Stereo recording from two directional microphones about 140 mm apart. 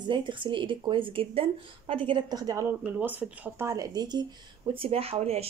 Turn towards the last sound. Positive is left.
turn(degrees=-45)  # may be behind; listen again after turning